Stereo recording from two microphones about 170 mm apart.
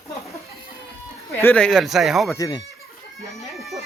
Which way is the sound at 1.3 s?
10° left (ahead or behind).